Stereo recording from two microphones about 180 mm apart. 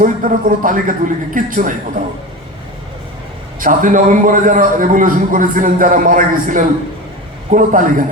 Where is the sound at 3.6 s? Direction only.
50° right (ahead or behind).